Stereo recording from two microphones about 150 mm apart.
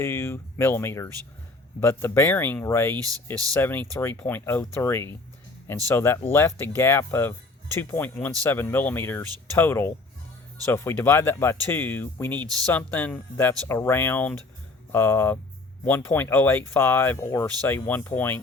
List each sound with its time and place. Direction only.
0.0 s speech: 15° left (ahead or behind)